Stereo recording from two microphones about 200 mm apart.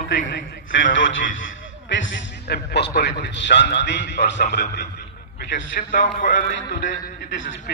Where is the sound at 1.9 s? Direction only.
65° left (ahead or behind).